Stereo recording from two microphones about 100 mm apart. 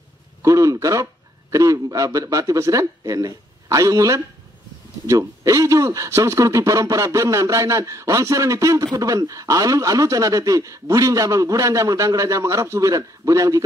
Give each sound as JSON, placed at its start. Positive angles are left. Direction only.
{"t": 0.4, "sound": "a man's voice", "side_deg": -35}